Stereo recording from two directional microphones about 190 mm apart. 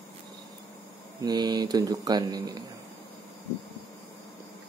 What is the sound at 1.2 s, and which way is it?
Speech, 20° right (ahead or behind).